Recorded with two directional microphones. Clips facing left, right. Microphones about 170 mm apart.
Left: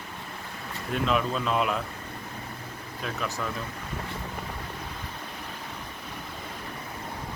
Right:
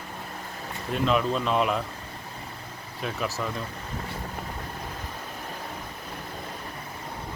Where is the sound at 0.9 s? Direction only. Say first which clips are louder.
Right 2 dB; centre (ahead or behind).